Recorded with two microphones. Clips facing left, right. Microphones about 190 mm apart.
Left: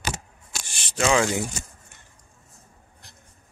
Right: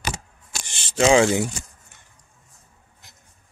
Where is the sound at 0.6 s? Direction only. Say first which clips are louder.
Right 5 dB; 25° right (ahead or behind).